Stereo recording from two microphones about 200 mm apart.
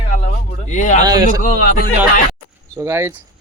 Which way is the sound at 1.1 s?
20° right (ahead or behind).